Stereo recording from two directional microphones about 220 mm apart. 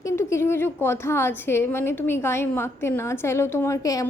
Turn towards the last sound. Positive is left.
turn(degrees=15)  # may be behind; listen again after turning